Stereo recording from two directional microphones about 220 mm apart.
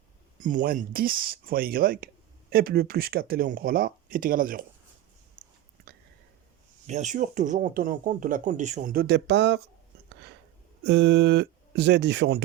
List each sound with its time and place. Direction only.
0.3 s speech: 35° right (ahead or behind)
6.8 s speech: 30° right (ahead or behind); by 9.6 s 50° right (ahead or behind)
10.8 s speech: 50° right (ahead or behind)